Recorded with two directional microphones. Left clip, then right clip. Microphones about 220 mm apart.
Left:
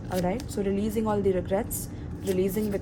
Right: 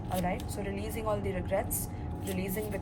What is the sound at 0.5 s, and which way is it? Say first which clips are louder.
A woman's voice: left 9 dB; 55° left (ahead or behind).